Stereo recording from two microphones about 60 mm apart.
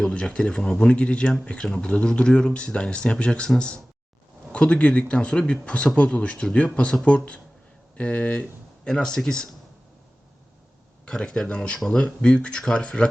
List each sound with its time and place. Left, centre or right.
0.0 s speech: centre
4.5 s speech: left
11.0 s speech: centre